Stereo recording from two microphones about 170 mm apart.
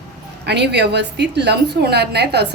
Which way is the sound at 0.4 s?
80° right.